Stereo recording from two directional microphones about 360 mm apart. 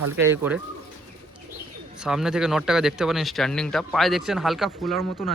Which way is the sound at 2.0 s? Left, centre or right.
Centre.